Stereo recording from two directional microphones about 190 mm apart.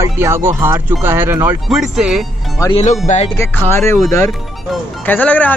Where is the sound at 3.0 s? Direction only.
35° left (ahead or behind).